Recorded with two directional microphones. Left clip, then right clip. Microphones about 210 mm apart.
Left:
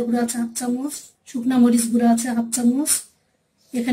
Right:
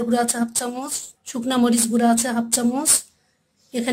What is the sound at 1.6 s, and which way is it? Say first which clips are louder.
Speech: left 1 dB; 55° right (ahead or behind).